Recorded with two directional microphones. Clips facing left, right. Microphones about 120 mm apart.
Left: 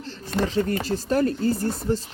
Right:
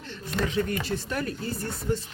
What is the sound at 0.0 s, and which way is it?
Speech, 35° left (ahead or behind).